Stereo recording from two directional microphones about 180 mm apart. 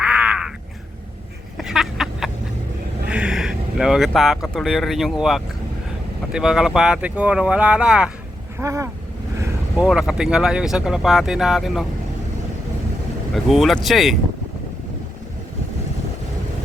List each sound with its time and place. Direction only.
0.0 s crow: 5° right (ahead or behind)
1.5 s a sound: centre (ahead or behind)
3.1 s speech: 5° right (ahead or behind)
8.5 s speech: 15° right (ahead or behind)
9.8 s speech: 5° right (ahead or behind)
13.3 s speech: centre (ahead or behind)